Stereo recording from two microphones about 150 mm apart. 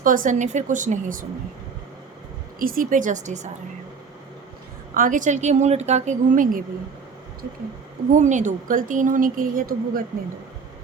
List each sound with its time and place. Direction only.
0.0 s a woman's voice: 65° right (ahead or behind)
2.6 s a woman's voice: 65° right (ahead or behind); by 3.5 s 50° right (ahead or behind)
4.9 s a woman's voice: 60° right (ahead or behind)
8.1 s a woman's voice: 55° right (ahead or behind); by 10.0 s 70° right (ahead or behind)